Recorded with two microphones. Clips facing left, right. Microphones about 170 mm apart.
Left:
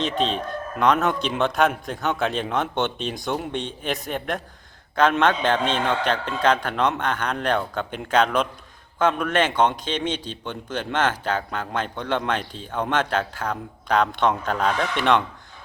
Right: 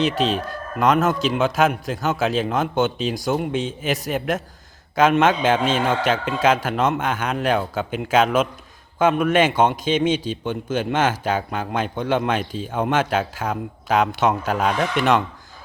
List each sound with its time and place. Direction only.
0.0 s a man's voice: 5° right (ahead or behind)